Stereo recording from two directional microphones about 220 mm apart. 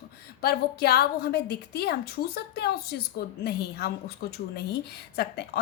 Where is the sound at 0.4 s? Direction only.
45° left (ahead or behind).